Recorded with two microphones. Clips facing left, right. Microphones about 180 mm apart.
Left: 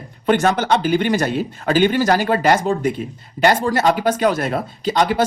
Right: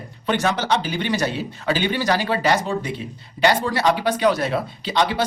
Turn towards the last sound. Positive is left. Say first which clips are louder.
# left 4 dB
turn(degrees=45)  # may be behind; listen again after turning